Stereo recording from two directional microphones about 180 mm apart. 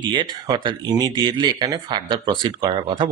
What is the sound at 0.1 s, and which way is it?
Speech, 25° right (ahead or behind).